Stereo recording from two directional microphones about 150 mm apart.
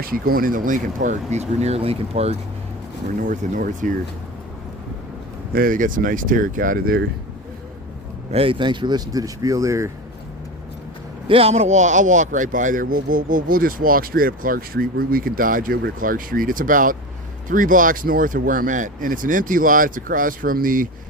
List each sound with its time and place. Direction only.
0.0 s speech: 75° right (ahead or behind); by 2.4 s 45° right (ahead or behind)
3.2 s speech: 65° right (ahead or behind)
5.5 s speech: 65° right (ahead or behind)
8.3 s speech: 40° right (ahead or behind); by 9.9 s 20° right (ahead or behind)
11.3 s speech: 40° right (ahead or behind); by 20.9 s 70° right (ahead or behind)